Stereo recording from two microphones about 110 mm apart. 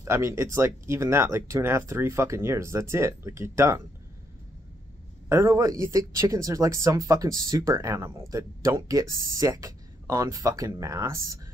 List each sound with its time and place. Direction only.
0.0 s speech: 25° right (ahead or behind)
5.3 s speech: 25° right (ahead or behind)